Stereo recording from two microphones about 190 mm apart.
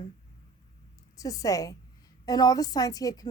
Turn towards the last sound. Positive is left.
turn(degrees=20)  # may be behind; listen again after turning